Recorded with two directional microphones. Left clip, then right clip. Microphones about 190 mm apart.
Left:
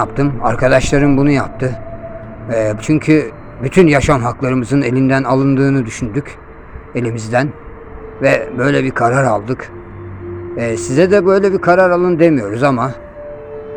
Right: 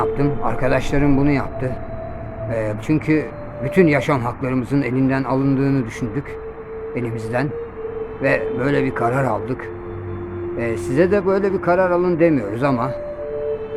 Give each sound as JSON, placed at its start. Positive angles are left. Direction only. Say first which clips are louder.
{"t": 0.0, "sound": "speech", "louder": "left 4 dB", "side_deg": 25}
{"t": 10.6, "sound": "speech", "louder": "left 5 dB", "side_deg": 25}